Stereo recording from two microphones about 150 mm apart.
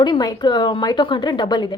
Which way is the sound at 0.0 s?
25° left (ahead or behind).